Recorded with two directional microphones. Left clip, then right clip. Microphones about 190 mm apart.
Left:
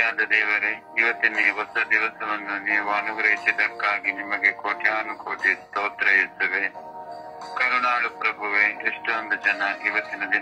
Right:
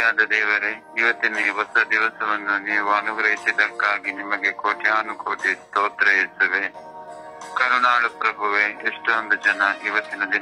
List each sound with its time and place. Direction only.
0.0 s a man's voice: 30° right (ahead or behind)